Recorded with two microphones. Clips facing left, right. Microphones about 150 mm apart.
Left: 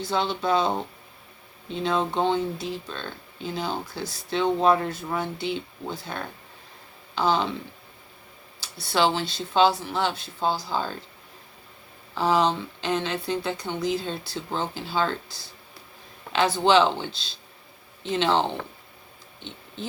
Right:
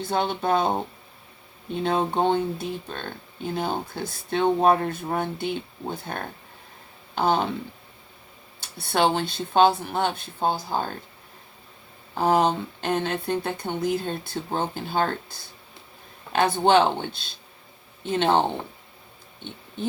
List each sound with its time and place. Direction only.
0.0 s speech: 55° right (ahead or behind)
8.6 s speech: 55° right (ahead or behind)
12.1 s speech: 50° right (ahead or behind)
16.6 s speech: 50° right (ahead or behind)